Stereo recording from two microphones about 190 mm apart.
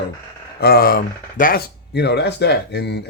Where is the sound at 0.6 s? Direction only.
55° left (ahead or behind).